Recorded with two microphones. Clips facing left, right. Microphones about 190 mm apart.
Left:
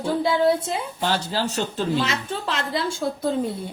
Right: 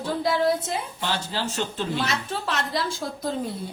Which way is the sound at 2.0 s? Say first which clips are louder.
Left 2 dB; 25° left (ahead or behind).